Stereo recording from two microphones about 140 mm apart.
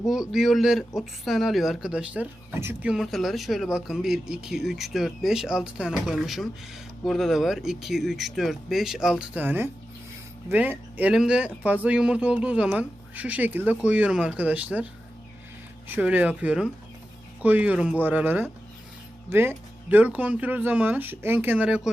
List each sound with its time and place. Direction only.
0.0 s speech: centre (ahead or behind)
2.6 s speech: 15° right (ahead or behind)
2.9 s speech: centre (ahead or behind)
16.0 s speech: 10° right (ahead or behind)